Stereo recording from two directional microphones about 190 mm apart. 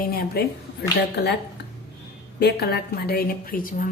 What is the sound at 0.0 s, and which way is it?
Speech, 55° left (ahead or behind).